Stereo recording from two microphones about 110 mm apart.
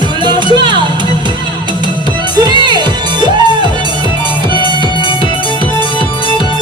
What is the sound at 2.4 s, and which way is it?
Music, 40° right (ahead or behind).